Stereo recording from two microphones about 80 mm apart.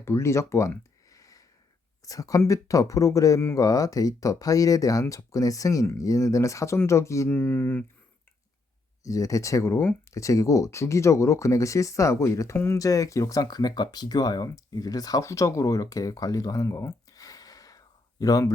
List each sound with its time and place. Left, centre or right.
0.0 s speech: left
1.1 s a sound: left
2.0 s speech: left
7.3 s speech: left
9.0 s speech: left
12.8 s speech: left